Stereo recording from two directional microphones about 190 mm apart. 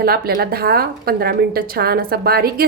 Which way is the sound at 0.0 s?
55° right (ahead or behind).